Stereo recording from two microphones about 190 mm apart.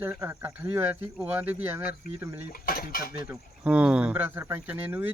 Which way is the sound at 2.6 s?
50° left (ahead or behind).